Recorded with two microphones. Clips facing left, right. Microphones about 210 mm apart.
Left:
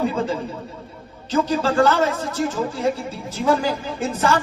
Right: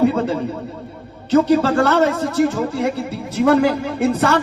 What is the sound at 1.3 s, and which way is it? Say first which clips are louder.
A man's voice: right 6 dB; 65° right (ahead or behind).